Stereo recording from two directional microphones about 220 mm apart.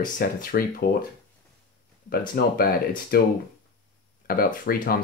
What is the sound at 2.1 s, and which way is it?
Speech, 45° left (ahead or behind).